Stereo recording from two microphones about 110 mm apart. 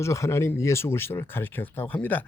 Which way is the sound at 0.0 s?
25° left (ahead or behind).